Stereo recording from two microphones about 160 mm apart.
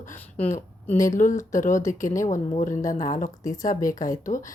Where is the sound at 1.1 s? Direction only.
55° left (ahead or behind).